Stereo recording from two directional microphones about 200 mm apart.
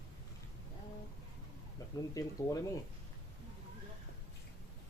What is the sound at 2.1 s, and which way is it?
Speech, 15° left (ahead or behind).